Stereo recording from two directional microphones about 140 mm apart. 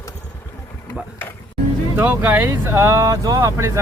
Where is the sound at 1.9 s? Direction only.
15° right (ahead or behind).